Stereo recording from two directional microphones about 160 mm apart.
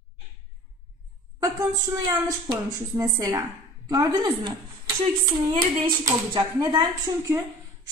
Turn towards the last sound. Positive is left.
turn(degrees=-25)  # may be behind; listen again after turning